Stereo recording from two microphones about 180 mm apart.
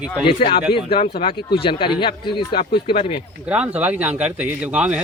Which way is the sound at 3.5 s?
5° right (ahead or behind).